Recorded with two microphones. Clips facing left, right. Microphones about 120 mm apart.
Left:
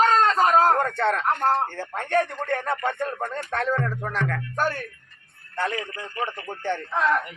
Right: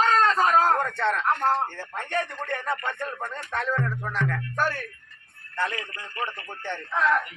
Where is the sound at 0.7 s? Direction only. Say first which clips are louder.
Left 2 dB; 45° left (ahead or behind).